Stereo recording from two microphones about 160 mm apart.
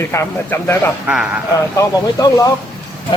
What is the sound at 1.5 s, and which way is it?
Speech, 20° left (ahead or behind).